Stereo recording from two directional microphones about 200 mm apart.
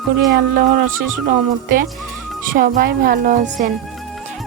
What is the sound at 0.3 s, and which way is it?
A woman's voice, 50° right (ahead or behind).